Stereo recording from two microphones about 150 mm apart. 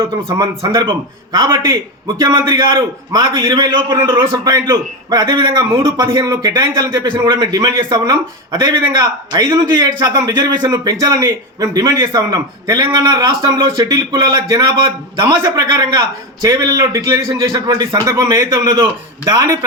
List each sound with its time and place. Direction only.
0.0 s a man's voice: 35° right (ahead or behind)